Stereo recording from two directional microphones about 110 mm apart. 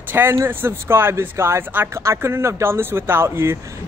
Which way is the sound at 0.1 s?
25° right (ahead or behind).